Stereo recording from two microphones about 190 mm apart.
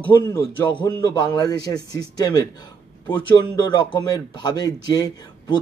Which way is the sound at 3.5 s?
25° left (ahead or behind).